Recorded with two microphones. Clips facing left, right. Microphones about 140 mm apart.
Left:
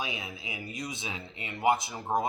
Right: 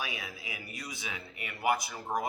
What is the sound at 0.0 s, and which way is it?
Speech, 20° left (ahead or behind).